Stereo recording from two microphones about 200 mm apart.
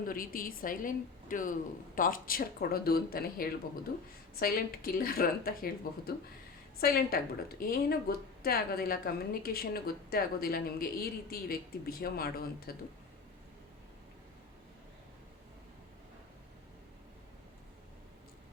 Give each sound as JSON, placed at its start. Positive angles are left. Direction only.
{"t": 0.0, "sound": "a woman's voice", "side_deg": 45}
{"t": 6.7, "sound": "a woman's voice", "side_deg": 50}